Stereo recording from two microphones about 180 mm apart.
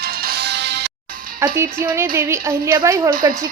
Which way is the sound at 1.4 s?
15° right (ahead or behind).